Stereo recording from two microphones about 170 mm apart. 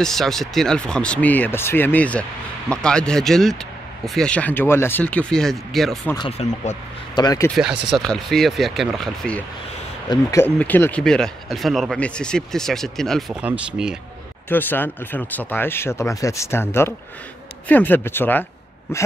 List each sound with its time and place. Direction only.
0.0 s speech: centre (ahead or behind)
6.1 s speech: 35° left (ahead or behind)
7.2 s speech: 25° left (ahead or behind)
7.5 s speech: centre (ahead or behind)
10.0 s speech: 15° left (ahead or behind)
13.3 s speech: 10° right (ahead or behind)
14.5 s speech: 10° left (ahead or behind)